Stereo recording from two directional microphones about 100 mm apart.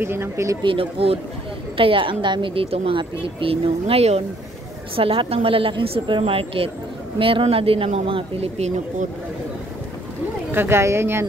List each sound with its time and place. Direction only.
0.0 s speech: 25° right (ahead or behind)
0.6 s a woman's voice: 60° right (ahead or behind)
3.0 s a woman's voice: 60° right (ahead or behind); by 4.2 s 85° right
4.9 s a woman's voice: 65° right (ahead or behind); by 8.7 s 90° right
10.5 s speech: 25° right (ahead or behind)